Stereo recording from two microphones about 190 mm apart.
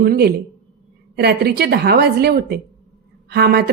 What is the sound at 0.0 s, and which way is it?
A woman's voice, 55° right (ahead or behind).